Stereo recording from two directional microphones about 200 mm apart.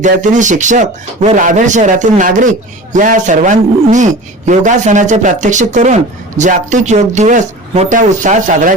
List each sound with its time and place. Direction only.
0.0 s speech: 40° right (ahead or behind)